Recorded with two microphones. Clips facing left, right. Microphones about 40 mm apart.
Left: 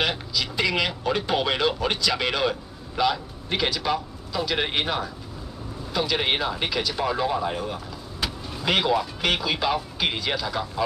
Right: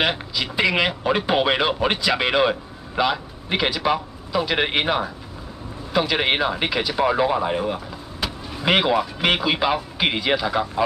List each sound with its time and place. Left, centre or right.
0.0 s speech: right
8.2 s vehicle: centre
8.6 s speech: right